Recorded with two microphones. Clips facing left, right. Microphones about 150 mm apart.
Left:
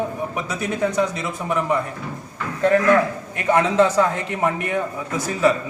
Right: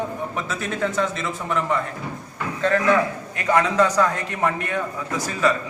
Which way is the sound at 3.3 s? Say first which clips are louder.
Left 2 dB; 25° left (ahead or behind).